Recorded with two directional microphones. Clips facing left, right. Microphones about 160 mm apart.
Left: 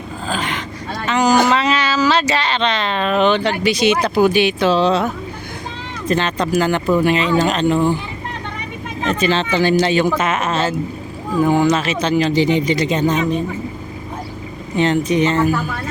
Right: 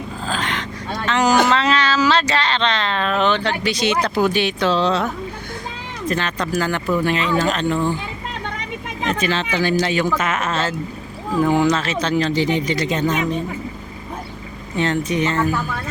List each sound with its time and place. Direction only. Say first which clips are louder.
0.3 s a sound: left 2 dB; 5° left (ahead or behind)
2.0 s speech: left 1 dB; 5° left (ahead or behind)
6.1 s speech: left 4 dB; 20° left (ahead or behind)
9.2 s speech: left 6 dB; 30° left (ahead or behind)
11.3 s speech: left 2 dB; centre (ahead or behind)
11.7 s speech: left 3 dB; 15° left (ahead or behind)
14.8 s speech: left 4 dB; 20° left (ahead or behind)